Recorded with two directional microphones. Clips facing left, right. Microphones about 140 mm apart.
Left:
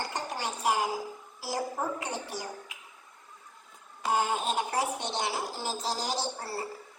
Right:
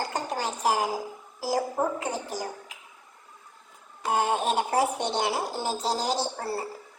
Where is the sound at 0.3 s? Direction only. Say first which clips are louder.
Right 3 dB; 35° right (ahead or behind).